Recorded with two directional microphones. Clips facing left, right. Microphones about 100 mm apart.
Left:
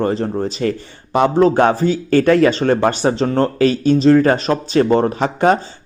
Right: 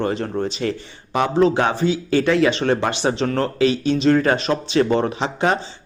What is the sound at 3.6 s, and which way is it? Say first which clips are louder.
Speech: left 4 dB; 40° left (ahead or behind).